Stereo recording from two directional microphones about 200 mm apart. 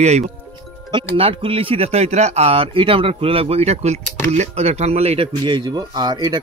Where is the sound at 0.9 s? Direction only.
25° right (ahead or behind).